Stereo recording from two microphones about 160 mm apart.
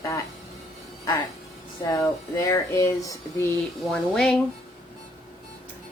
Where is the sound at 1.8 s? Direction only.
20° left (ahead or behind).